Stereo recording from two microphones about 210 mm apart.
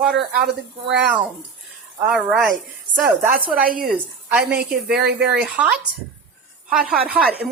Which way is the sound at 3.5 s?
40° right (ahead or behind).